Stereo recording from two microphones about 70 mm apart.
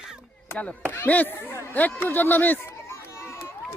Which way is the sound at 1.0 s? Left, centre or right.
Left.